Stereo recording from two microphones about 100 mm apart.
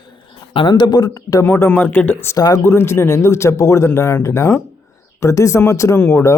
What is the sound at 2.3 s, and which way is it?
Speech, 40° left (ahead or behind).